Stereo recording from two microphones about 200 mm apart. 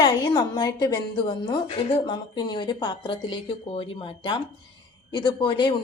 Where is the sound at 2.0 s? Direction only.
20° left (ahead or behind).